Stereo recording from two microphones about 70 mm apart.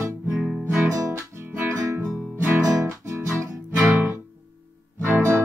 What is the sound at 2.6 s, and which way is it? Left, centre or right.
Music, right.